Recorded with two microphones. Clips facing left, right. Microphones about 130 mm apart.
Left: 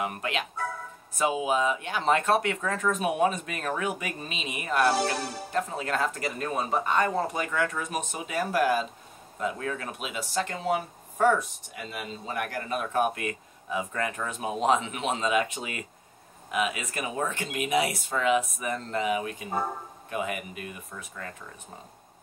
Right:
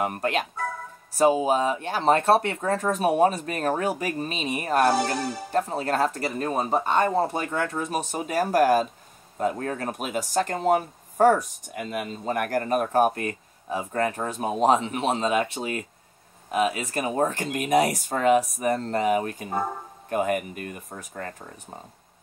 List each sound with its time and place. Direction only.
0.0 s speech: 45° right (ahead or behind)